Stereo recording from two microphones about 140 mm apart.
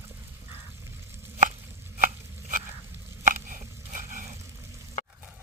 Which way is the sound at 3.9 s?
70° right (ahead or behind).